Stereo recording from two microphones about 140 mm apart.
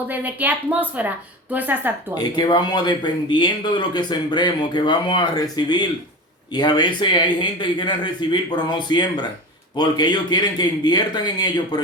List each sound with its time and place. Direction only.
0.1 s a woman's voice: 10° right (ahead or behind)
2.1 s speech: 30° left (ahead or behind)